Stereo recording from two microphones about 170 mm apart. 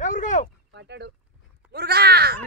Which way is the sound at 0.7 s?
85° right.